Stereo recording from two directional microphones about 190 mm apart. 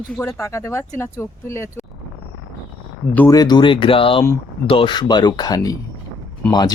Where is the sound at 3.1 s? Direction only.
15° left (ahead or behind).